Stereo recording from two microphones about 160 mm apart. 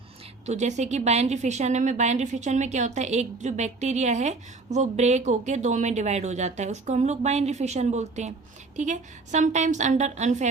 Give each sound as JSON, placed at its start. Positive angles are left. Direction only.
{"t": 0.4, "sound": "a woman's voice", "side_deg": -45}